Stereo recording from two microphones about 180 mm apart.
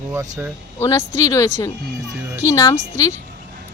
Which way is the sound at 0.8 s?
15° left (ahead or behind).